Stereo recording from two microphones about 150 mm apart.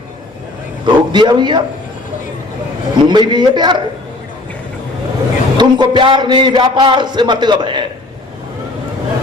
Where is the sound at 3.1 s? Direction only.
30° right (ahead or behind).